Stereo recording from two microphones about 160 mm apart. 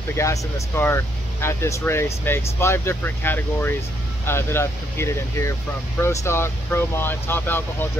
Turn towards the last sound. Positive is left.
turn(degrees=15)  # may be behind; listen again after turning